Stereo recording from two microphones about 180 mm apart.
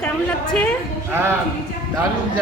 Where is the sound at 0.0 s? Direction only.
5° left (ahead or behind).